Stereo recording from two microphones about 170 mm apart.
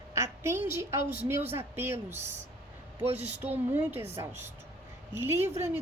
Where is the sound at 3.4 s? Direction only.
10° right (ahead or behind).